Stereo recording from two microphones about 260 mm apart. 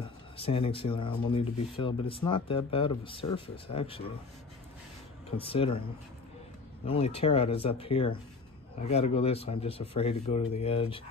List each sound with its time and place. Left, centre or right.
0.0 s speech: left
5.4 s speech: left
6.9 s speech: left